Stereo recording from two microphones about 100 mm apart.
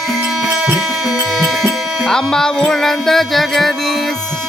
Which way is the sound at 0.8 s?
5° right (ahead or behind).